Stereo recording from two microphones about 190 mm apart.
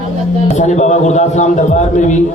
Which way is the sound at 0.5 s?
35° left (ahead or behind).